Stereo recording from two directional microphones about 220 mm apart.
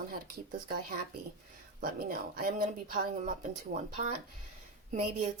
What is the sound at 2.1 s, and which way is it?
Speech, 40° right (ahead or behind).